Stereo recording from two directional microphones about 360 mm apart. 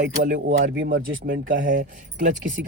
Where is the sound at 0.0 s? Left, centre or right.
Right.